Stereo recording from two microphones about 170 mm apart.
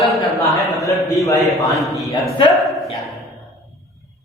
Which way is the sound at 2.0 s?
25° left (ahead or behind).